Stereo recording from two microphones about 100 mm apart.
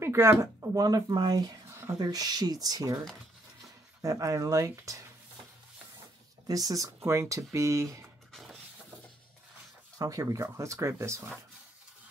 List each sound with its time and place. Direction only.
0.0 s speech: 25° right (ahead or behind)
1.7 s a sound: 25° right (ahead or behind)
2.0 s speech: 40° right (ahead or behind)
4.0 s speech: 35° right (ahead or behind)
6.4 s speech: 35° right (ahead or behind)
8.3 s a sound: centre (ahead or behind)
9.9 s speech: 35° right (ahead or behind)